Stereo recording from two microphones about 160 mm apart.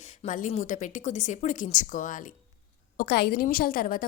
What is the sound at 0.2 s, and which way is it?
A woman's voice, 50° left (ahead or behind).